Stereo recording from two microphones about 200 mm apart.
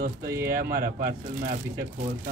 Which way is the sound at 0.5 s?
45° right (ahead or behind).